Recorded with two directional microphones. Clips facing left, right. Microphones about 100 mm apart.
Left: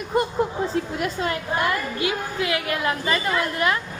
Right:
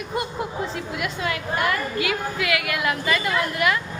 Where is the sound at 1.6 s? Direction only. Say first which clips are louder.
Right 1 dB; 25° left (ahead or behind).